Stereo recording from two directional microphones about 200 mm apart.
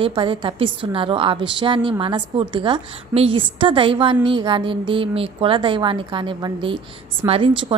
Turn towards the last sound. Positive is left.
turn(degrees=-25)  # may be behind; listen again after turning